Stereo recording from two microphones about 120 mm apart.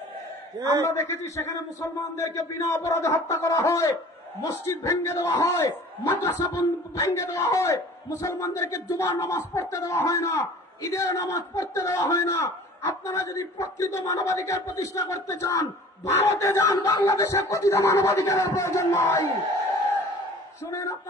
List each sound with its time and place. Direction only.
0.6 s a man's voice: 30° right (ahead or behind)
0.8 s a man's voice: 25° left (ahead or behind)